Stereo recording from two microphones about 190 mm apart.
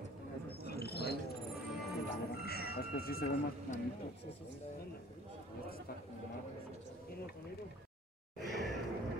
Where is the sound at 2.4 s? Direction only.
55° left (ahead or behind).